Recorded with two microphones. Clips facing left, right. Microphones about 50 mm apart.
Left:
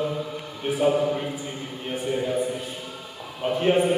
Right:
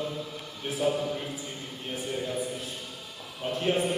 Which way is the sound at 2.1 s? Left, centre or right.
Left.